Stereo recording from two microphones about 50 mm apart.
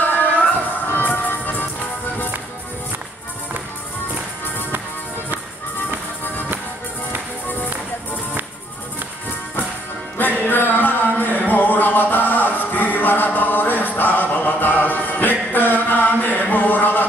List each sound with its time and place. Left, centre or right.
0.0 s music: left
10.4 s music: left